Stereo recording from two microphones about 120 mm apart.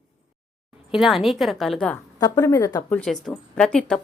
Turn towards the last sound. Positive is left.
turn(degrees=5)  # may be behind; listen again after turning